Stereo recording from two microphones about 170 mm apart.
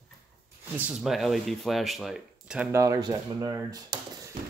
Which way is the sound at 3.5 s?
20° right (ahead or behind).